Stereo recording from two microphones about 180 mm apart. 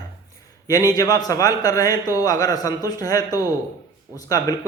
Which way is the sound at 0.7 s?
20° left (ahead or behind).